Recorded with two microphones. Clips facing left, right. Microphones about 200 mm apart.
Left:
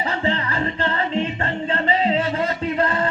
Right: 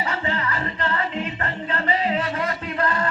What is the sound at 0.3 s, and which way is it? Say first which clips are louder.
Music: left 4 dB; 30° left (ahead or behind).